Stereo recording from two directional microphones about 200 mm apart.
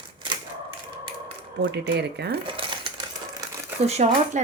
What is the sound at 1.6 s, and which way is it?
Speech, 55° right (ahead or behind).